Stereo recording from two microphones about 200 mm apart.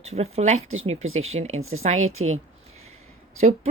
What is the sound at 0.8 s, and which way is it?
Speech, 35° right (ahead or behind).